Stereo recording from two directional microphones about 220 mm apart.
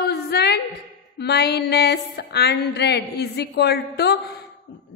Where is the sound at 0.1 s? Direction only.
50° left (ahead or behind).